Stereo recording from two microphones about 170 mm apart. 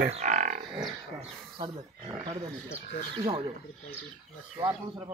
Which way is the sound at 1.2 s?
30° right (ahead or behind).